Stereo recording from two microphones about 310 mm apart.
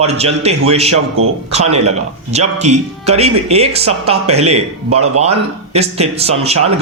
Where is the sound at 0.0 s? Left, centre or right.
Centre.